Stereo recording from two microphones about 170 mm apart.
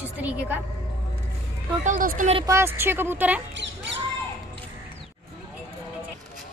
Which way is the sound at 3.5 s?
90° right.